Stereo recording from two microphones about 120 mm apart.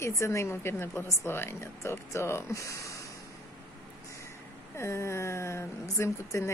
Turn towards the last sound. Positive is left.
turn(degrees=25)  # may be behind; listen again after turning